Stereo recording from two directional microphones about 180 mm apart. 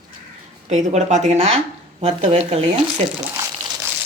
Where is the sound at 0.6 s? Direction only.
40° right (ahead or behind).